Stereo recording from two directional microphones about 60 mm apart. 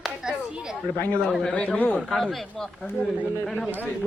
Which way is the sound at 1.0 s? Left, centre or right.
Left.